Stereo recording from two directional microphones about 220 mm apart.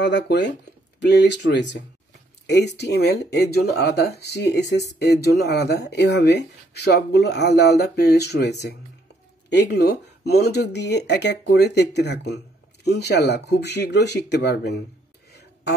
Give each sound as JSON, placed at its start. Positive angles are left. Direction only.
{"t": 0.0, "sound": "speech", "side_deg": 50}